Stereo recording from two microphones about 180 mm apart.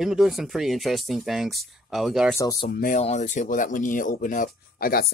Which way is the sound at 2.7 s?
50° left (ahead or behind).